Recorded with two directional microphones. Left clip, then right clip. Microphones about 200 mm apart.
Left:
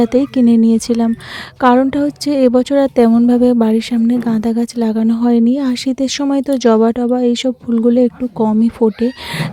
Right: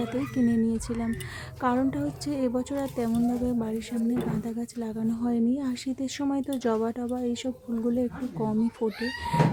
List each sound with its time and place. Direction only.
0.0 s a woman's voice: 45° left (ahead or behind)